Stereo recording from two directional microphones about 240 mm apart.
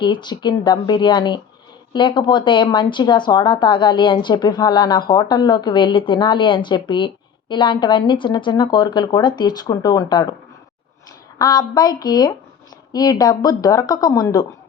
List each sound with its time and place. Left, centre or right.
0.0 s speech: centre
11.3 s speech: centre